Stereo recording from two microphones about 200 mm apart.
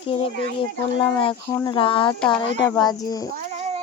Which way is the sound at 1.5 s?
15° left (ahead or behind).